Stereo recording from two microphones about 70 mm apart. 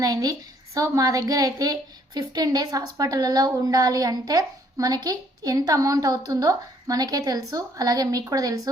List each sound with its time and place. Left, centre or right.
0.0 s a woman's voice: right